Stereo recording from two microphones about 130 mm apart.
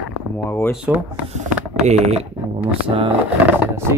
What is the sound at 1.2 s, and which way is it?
Speech, 60° right (ahead or behind).